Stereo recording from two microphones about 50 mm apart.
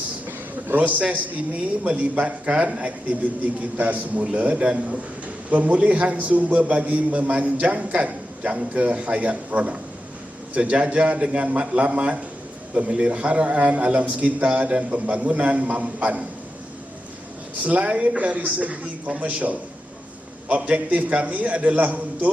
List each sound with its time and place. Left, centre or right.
0.8 s a man's voice: right
17.6 s a man's voice: right